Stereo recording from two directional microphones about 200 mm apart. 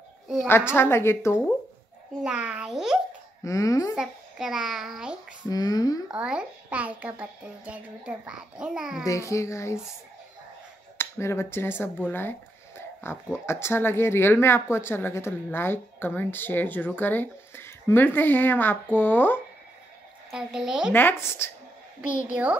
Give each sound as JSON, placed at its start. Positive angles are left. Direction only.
{"t": 0.5, "sound": "speech", "side_deg": 10}
{"t": 2.2, "sound": "a child's voice", "side_deg": -5}
{"t": 3.4, "sound": "speech", "side_deg": 15}
{"t": 3.9, "sound": "a child's voice", "side_deg": 0}
{"t": 5.5, "sound": "speech", "side_deg": 20}
{"t": 6.0, "sound": "a child's voice", "side_deg": -5}
{"t": 9.0, "sound": "speech", "side_deg": 15}
{"t": 11.0, "sound": "speech", "side_deg": 15}
{"t": 20.2, "sound": "a child's voice", "side_deg": -5}
{"t": 20.9, "sound": "speech", "side_deg": 10}
{"t": 22.3, "sound": "speech", "side_deg": -5}